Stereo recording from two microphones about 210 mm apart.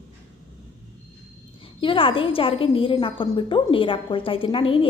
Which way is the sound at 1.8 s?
25° left (ahead or behind).